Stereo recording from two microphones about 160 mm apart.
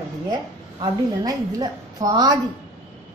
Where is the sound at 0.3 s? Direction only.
25° right (ahead or behind).